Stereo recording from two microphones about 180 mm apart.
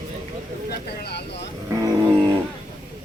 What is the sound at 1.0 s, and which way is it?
Vehicle, 65° left (ahead or behind).